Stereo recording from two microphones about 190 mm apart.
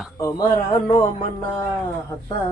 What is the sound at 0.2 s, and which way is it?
Speech, 20° left (ahead or behind).